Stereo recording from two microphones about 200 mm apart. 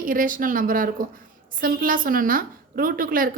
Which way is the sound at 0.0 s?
45° right (ahead or behind).